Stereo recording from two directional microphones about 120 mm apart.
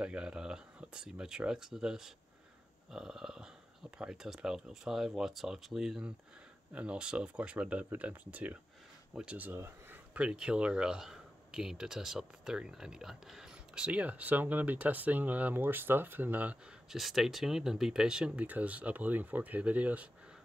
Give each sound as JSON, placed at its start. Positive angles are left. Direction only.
{"t": 0.0, "sound": "speech", "side_deg": -10}
{"t": 16.9, "sound": "speech", "side_deg": 0}